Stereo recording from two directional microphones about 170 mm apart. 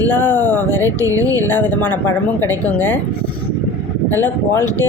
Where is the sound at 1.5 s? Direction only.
10° left (ahead or behind).